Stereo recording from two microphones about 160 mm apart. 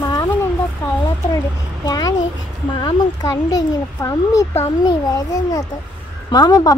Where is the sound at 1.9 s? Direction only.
25° left (ahead or behind).